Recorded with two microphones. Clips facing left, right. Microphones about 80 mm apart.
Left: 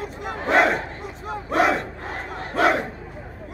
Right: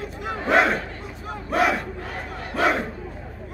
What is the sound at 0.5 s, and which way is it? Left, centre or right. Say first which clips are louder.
Battle cry: left 1 dB; centre.